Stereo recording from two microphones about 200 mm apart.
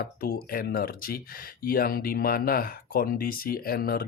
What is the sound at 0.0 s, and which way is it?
Speech, 50° left (ahead or behind).